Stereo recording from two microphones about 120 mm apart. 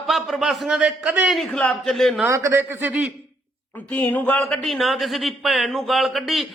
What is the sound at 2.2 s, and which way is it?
Speech, 20° right (ahead or behind).